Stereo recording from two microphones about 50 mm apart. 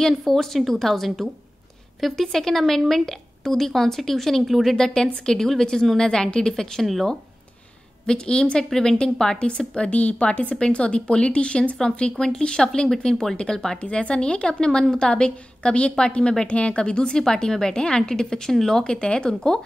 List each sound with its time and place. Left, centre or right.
0.0 s a woman's voice: centre
4.7 s a woman's voice: centre
8.1 s a woman's voice: centre
8.6 s a woman's voice: centre
13.7 s a woman's voice: left